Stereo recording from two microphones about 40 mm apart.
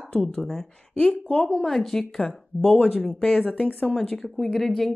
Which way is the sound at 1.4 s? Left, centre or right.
Centre.